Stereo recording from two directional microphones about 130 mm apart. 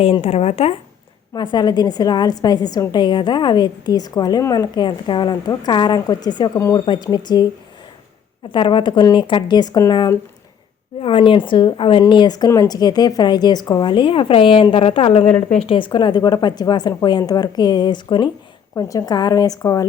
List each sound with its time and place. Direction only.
0.0 s speech: 50° left (ahead or behind)
1.3 s a woman's voice: 35° left (ahead or behind)
8.5 s a woman's voice: 40° left (ahead or behind)
11.0 s a woman's voice: 45° left (ahead or behind)
15.3 s speech: 10° left (ahead or behind)
15.5 s a woman's voice: 45° left (ahead or behind); by 19.9 s 30° left (ahead or behind)